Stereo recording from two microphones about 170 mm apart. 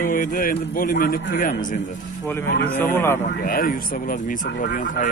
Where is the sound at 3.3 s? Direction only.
55° left (ahead or behind).